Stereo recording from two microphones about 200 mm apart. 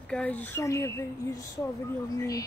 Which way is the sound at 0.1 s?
5° left (ahead or behind).